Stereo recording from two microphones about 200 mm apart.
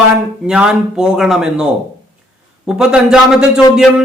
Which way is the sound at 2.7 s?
5° right (ahead or behind).